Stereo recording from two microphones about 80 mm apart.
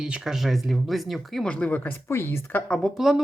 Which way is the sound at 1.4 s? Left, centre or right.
Centre.